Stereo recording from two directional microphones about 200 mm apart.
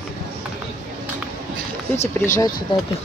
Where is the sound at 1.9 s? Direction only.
35° left (ahead or behind).